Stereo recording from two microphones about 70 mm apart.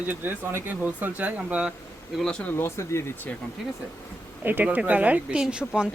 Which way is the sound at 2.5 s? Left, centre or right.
Left.